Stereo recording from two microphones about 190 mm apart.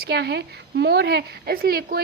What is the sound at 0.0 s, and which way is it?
A woman's voice, 60° right (ahead or behind).